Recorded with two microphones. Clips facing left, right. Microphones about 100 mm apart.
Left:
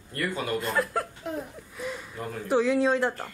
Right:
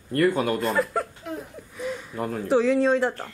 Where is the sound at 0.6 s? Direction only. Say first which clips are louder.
Right 3 dB; centre (ahead or behind).